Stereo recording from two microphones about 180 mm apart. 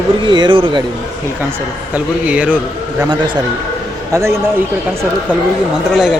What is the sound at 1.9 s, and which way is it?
Speech, 10° right (ahead or behind).